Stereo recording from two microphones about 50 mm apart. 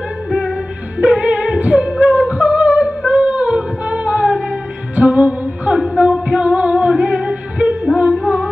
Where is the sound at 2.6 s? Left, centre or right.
Right.